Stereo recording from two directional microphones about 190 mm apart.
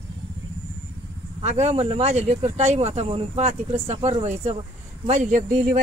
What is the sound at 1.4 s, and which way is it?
Speech, 35° right (ahead or behind).